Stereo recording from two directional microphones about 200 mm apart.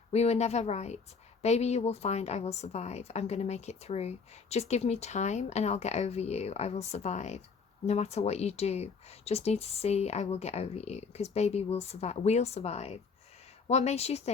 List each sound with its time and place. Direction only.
0.1 s speech: 30° left (ahead or behind)